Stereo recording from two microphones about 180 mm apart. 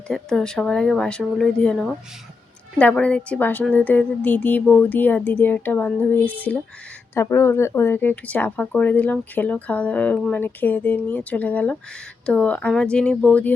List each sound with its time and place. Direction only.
0.1 s speech: 5° left (ahead or behind)